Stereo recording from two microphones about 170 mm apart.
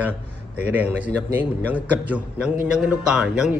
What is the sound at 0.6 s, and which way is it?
A man's voice, 10° right (ahead or behind).